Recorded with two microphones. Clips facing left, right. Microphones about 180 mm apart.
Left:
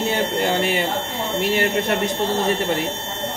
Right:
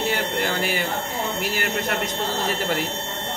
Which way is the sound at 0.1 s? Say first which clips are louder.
Left 4 dB; 25° left (ahead or behind).